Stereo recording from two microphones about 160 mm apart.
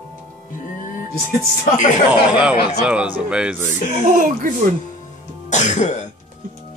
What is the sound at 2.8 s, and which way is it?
Speech, 5° right (ahead or behind).